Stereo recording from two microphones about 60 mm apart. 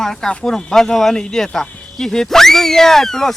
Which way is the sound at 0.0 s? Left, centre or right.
Centre.